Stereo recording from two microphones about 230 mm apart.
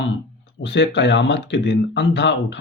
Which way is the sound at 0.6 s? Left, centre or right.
Left.